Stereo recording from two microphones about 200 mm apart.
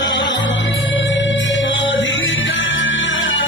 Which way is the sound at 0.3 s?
70° left (ahead or behind).